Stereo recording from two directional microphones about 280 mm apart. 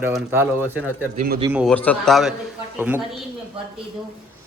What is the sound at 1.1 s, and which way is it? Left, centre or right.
Speech, right.